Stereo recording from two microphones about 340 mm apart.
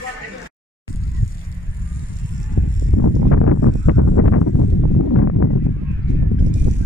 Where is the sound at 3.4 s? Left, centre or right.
Left.